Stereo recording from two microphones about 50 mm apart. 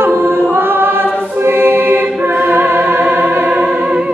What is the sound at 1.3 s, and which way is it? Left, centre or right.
Music, right.